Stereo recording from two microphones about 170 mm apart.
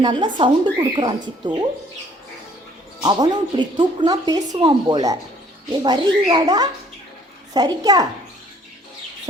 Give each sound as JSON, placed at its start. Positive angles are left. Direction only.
{"t": 0.0, "sound": "a woman's voice", "side_deg": -25}
{"t": 3.0, "sound": "a woman's voice", "side_deg": -25}